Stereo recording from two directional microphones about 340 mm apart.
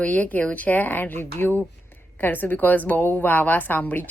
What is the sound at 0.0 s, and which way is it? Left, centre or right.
A woman's voice, centre.